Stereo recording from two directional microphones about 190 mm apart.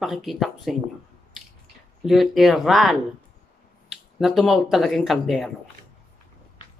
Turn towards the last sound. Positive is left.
turn(degrees=0)  # may be behind; listen again after turning